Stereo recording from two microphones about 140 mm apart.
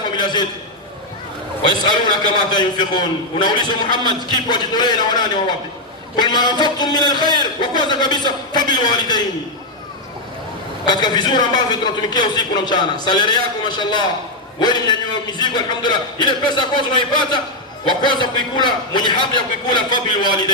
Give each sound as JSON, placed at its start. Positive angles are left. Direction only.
{"t": 0.2, "sound": "a sound", "side_deg": 30}
{"t": 1.6, "sound": "a man's voice", "side_deg": 30}
{"t": 10.8, "sound": "a man's voice", "side_deg": 30}